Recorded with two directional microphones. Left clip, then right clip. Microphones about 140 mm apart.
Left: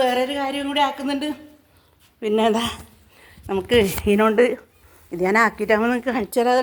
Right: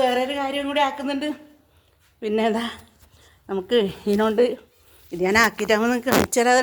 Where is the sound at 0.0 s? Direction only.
Centre (ahead or behind).